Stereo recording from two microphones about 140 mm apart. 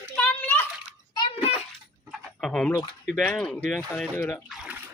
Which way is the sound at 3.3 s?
5° left (ahead or behind).